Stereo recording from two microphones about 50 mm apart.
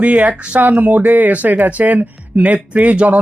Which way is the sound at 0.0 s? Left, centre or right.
Right.